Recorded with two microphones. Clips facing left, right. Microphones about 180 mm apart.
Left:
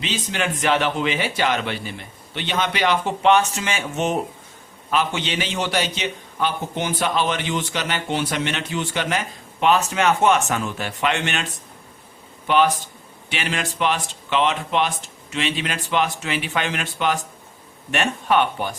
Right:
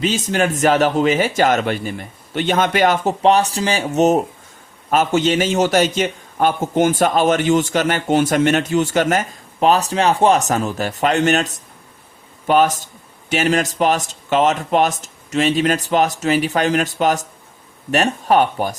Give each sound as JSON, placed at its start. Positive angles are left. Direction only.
{"t": 0.0, "sound": "a man's voice", "side_deg": -45}